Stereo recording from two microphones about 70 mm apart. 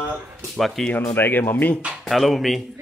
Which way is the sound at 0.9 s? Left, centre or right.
Left.